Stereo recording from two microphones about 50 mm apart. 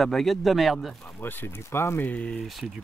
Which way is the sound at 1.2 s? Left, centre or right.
Left.